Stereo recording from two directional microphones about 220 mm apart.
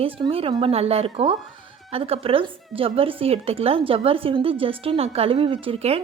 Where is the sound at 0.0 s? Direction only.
25° right (ahead or behind).